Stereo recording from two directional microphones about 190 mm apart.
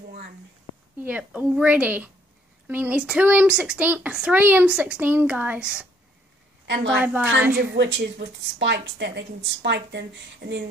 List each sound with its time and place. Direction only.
1.0 s speech: 5° right (ahead or behind)
6.7 s a woman's voice: 65° right (ahead or behind)
7.0 s a woman's voice: 5° right (ahead or behind)
7.5 s a woman's voice: 60° right (ahead or behind)